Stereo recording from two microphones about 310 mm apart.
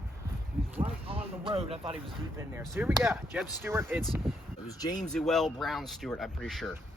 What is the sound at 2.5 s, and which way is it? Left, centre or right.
Speech, centre.